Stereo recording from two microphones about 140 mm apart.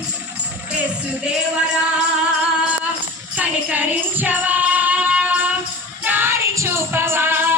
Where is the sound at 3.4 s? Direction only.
10° right (ahead or behind).